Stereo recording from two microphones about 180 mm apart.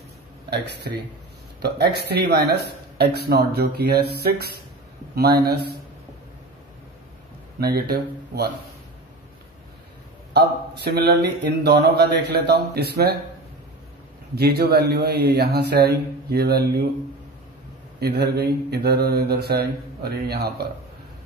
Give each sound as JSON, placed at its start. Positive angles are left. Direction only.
{"t": 1.6, "sound": "speech", "side_deg": -65}
{"t": 7.6, "sound": "speech", "side_deg": -60}
{"t": 10.3, "sound": "speech", "side_deg": -65}
{"t": 14.3, "sound": "speech", "side_deg": -60}
{"t": 18.0, "sound": "speech", "side_deg": -65}